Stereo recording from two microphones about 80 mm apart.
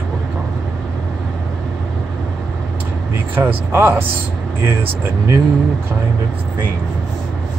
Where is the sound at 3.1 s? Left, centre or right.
Right.